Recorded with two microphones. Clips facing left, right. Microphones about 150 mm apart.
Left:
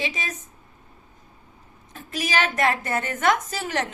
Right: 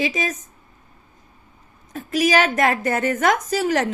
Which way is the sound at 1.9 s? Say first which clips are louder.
Right 9 dB; 45° right (ahead or behind).